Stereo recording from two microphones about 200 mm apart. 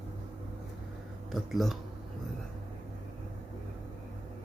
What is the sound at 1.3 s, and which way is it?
Speech, centre (ahead or behind).